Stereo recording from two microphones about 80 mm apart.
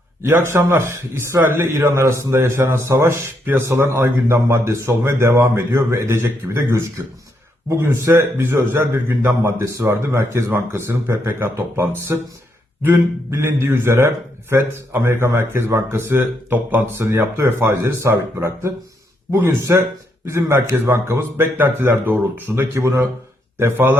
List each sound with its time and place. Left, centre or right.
0.2 s a man's voice: right
7.9 s speech: right
9.2 s a man's voice: right
19.3 s a man's voice: right